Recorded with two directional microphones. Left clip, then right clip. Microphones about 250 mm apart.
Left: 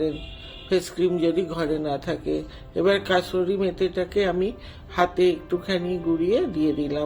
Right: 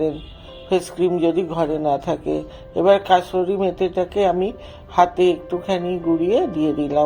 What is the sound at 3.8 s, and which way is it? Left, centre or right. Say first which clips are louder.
Speech: right 5 dB; left.